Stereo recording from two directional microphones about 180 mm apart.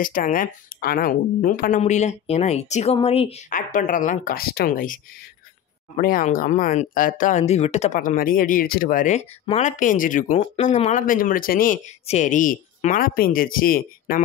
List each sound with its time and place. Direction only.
0.0 s speech: 50° left (ahead or behind)
3.5 s speech: 45° left (ahead or behind)
10.4 s speech: 35° left (ahead or behind); by 14.2 s 50° left (ahead or behind)